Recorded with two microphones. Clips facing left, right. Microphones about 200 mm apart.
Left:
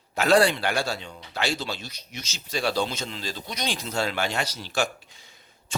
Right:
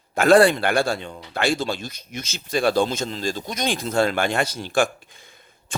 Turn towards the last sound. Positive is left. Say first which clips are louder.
# right 2 dB
turn(degrees=-50)  # may be behind; listen again after turning